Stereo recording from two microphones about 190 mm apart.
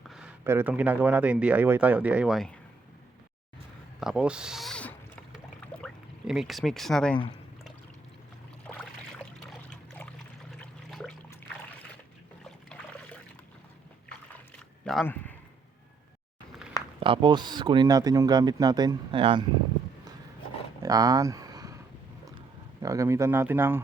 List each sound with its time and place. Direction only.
0.1 s speech: 5° right (ahead or behind)
4.0 s a sound: 5° right (ahead or behind)
8.7 s a sound: centre (ahead or behind)
9.5 s trickle: 5° left (ahead or behind)
10.6 s water: centre (ahead or behind)
12.5 s trickle: 5° left (ahead or behind)
15.0 s a man's voice: 10° left (ahead or behind)
17.0 s speech: 25° right (ahead or behind)
20.8 s a sound: 20° right (ahead or behind)
22.8 s speech: 15° right (ahead or behind)